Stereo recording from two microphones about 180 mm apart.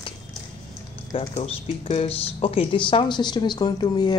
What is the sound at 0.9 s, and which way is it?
Speech, 35° left (ahead or behind).